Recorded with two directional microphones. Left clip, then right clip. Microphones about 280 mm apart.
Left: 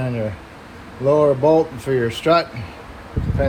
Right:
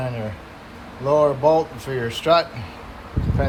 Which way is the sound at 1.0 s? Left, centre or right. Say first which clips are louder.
Left 2 dB; centre.